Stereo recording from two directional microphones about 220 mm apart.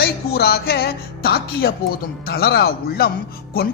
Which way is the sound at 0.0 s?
45° left (ahead or behind).